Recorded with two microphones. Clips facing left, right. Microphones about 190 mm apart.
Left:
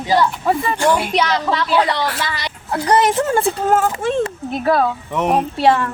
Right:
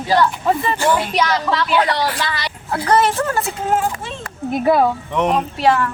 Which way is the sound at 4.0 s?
50° left (ahead or behind).